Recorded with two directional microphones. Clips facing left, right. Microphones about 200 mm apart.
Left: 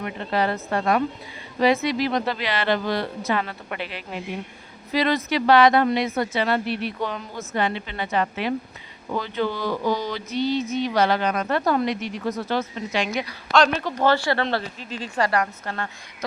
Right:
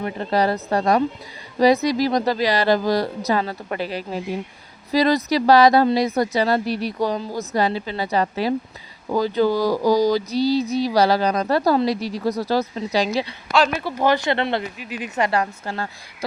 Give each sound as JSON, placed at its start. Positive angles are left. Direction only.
{"t": 0.0, "sound": "speech", "side_deg": -40}
{"t": 13.5, "sound": "speech", "side_deg": -10}